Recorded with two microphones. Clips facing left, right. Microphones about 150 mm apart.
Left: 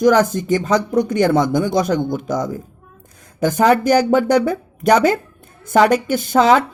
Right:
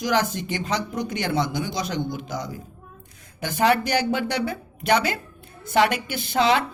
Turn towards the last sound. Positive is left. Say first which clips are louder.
# left 7 dB
turn(degrees=45)  # may be behind; listen again after turning